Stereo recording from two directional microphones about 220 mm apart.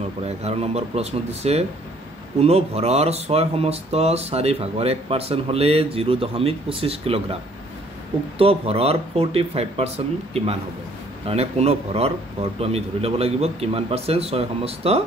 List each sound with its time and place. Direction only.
0.4 s speech: 30° right (ahead or behind)
8.4 s speech: 25° right (ahead or behind)